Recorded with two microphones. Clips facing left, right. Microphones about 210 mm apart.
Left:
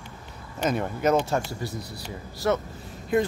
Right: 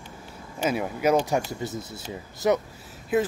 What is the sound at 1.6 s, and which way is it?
Speech, 25° right (ahead or behind).